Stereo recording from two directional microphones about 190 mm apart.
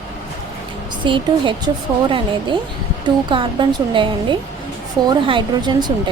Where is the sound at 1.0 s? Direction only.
25° right (ahead or behind).